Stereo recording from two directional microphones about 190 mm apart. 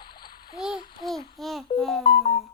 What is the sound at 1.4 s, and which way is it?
Speech, centre (ahead or behind).